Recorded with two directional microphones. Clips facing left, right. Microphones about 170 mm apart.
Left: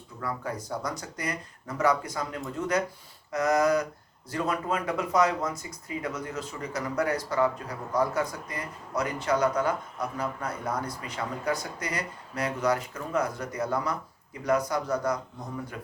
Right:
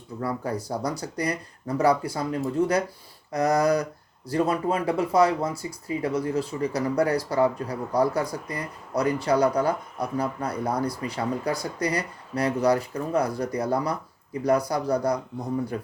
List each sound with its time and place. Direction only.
0.2 s speech: 35° right (ahead or behind)